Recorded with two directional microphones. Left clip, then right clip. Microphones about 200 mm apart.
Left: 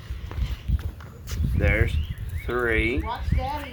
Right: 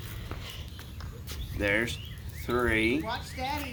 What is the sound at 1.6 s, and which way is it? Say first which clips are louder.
Speech: left 2 dB; 45° right (ahead or behind).